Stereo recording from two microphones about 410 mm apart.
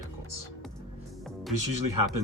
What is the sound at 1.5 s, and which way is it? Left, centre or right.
Speech, right.